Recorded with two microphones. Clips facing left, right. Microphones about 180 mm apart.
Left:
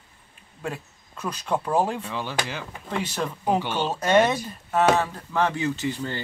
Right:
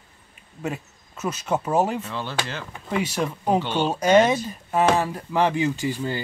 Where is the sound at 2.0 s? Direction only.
10° left (ahead or behind).